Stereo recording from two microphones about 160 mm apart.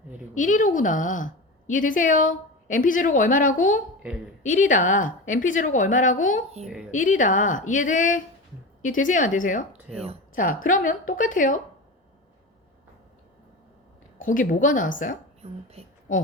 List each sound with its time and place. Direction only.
0.3 s a woman's voice: 55° left (ahead or behind)
9.9 s speech: 5° left (ahead or behind)
10.3 s a woman's voice: 55° left (ahead or behind)
14.2 s a woman's voice: 55° left (ahead or behind)
15.4 s speech: 40° right (ahead or behind)
16.1 s a woman's voice: 55° left (ahead or behind)